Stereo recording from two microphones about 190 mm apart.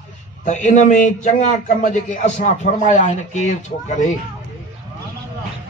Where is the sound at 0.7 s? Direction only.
40° left (ahead or behind).